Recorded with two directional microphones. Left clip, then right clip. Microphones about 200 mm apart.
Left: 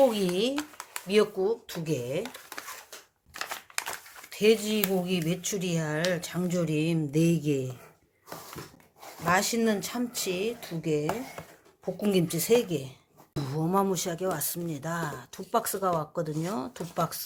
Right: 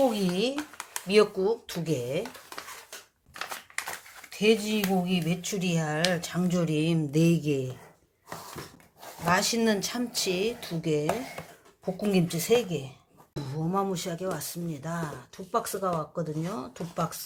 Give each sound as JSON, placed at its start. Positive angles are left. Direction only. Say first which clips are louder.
{"t": 0.1, "sound": "a sound", "louder": "left 1 dB", "side_deg": 15}
{"t": 0.8, "sound": "speech", "louder": "right 3 dB", "side_deg": 0}
{"t": 4.3, "sound": "speech", "louder": "left 1 dB", "side_deg": 15}
{"t": 9.2, "sound": "speech", "louder": "even", "side_deg": 10}
{"t": 11.9, "sound": "speech", "louder": "left 1 dB", "side_deg": 10}
{"t": 13.3, "sound": "speech", "louder": "left 3 dB", "side_deg": 35}
{"t": 13.7, "sound": "speech", "louder": "left 2 dB", "side_deg": 20}